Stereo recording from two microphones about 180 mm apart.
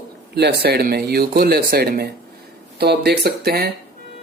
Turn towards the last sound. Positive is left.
turn(degrees=-60)  # may be behind; listen again after turning